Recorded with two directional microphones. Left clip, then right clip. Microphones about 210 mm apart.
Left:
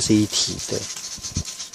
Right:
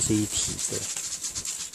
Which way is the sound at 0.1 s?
25° left (ahead or behind).